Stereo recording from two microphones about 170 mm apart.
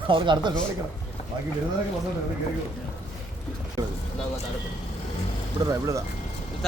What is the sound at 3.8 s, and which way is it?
Speech, 20° right (ahead or behind).